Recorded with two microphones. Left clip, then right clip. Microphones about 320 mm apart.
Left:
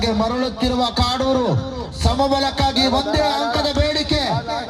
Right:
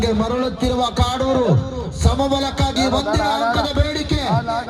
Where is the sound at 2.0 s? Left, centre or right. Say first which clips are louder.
Left 2 dB; left.